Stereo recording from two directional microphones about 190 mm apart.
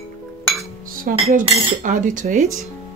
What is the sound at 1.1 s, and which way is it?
Cutlery, 45° right (ahead or behind).